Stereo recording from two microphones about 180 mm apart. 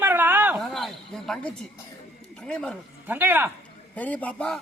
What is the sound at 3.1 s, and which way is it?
Speech, 10° right (ahead or behind).